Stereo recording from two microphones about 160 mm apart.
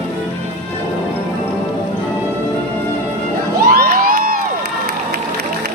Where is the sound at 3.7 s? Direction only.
60° right (ahead or behind).